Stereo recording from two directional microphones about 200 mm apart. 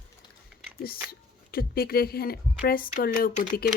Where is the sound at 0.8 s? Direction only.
50° left (ahead or behind).